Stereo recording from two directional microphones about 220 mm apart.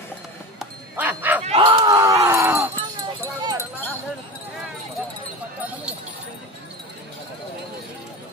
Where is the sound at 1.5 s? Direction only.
25° right (ahead or behind).